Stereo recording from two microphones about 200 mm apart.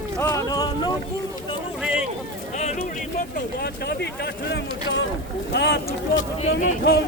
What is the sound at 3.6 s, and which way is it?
Speech, 55° left (ahead or behind).